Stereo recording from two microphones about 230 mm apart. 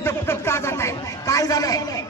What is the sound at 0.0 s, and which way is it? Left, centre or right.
A man's voice, centre.